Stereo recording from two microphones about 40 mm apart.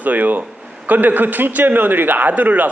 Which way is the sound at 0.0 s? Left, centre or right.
Right.